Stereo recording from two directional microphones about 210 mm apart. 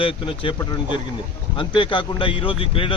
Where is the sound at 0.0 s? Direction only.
20° left (ahead or behind).